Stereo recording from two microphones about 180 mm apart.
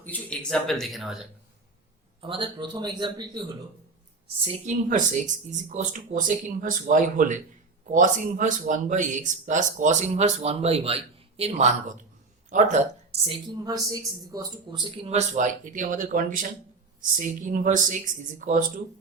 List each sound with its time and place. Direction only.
0.0 s speech: 10° left (ahead or behind)
2.2 s speech: 30° right (ahead or behind)
4.4 s speech: 40° right (ahead or behind)
13.5 s speech: 20° right (ahead or behind); by 18.6 s 45° right (ahead or behind)